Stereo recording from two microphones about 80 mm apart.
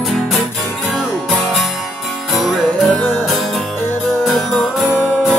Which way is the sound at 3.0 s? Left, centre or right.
Left.